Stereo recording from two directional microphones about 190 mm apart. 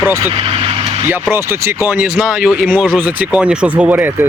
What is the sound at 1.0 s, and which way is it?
Speech, 10° right (ahead or behind).